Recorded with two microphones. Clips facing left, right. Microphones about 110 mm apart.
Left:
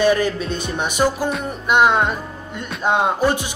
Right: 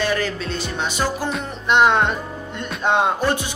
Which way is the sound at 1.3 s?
5° left (ahead or behind).